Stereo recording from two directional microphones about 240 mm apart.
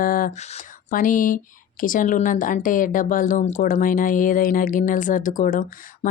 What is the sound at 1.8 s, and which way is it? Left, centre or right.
Speech, left.